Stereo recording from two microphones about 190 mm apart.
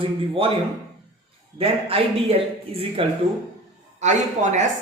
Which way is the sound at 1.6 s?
30° right (ahead or behind).